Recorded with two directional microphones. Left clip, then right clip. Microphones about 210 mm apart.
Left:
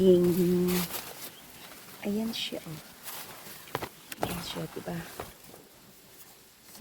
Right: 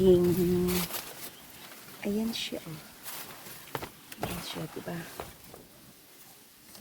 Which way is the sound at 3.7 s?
40° left (ahead or behind).